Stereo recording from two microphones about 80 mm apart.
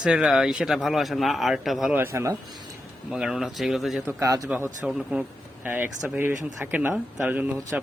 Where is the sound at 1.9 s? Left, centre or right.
Right.